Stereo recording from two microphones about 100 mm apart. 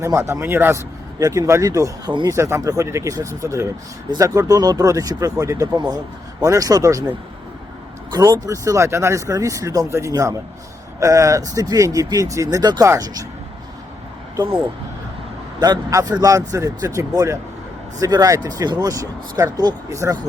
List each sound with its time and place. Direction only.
0.0 s speech: 30° right (ahead or behind)
1.2 s speech: 30° right (ahead or behind)
8.1 s speech: 35° right (ahead or behind)
15.6 s speech: 35° right (ahead or behind)